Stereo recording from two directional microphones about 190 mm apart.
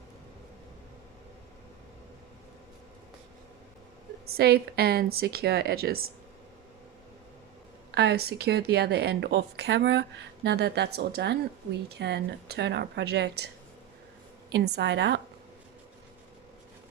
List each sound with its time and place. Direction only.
4.4 s a woman's voice: 55° right (ahead or behind)
7.9 s a woman's voice: 60° right (ahead or behind)
14.5 s a woman's voice: 65° right (ahead or behind)